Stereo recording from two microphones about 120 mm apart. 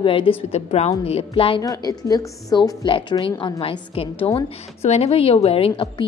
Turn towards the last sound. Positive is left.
turn(degrees=50)  # may be behind; listen again after turning